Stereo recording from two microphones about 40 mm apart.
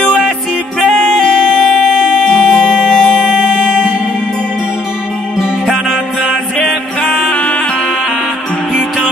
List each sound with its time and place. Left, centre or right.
2.2 s music: centre